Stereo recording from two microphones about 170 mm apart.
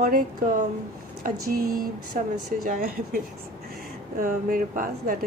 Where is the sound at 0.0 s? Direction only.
55° right (ahead or behind).